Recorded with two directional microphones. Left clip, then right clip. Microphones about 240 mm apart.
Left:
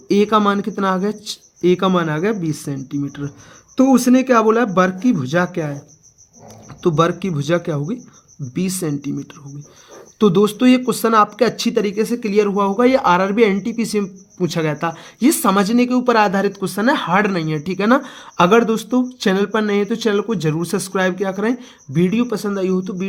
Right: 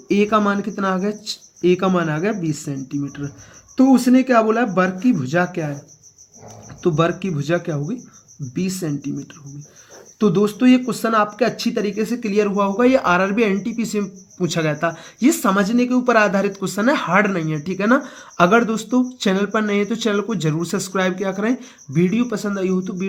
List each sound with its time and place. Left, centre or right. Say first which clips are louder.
0.1 s speech: left 2 dB; left
6.8 s speech: left 2 dB; left